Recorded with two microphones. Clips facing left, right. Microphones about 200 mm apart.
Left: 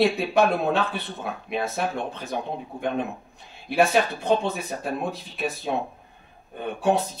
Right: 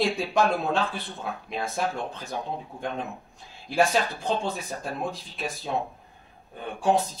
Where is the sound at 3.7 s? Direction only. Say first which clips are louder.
Left 3 dB; 60° left (ahead or behind).